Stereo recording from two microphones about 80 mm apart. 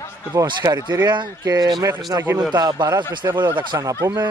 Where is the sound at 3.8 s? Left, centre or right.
Right.